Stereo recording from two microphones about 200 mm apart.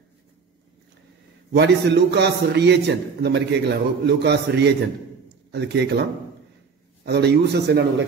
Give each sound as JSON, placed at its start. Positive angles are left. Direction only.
{"t": 1.5, "sound": "a man's voice", "side_deg": -60}
{"t": 7.1, "sound": "a man's voice", "side_deg": -55}